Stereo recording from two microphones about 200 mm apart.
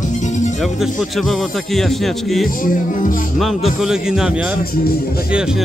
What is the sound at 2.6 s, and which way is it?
Music, 45° left (ahead or behind).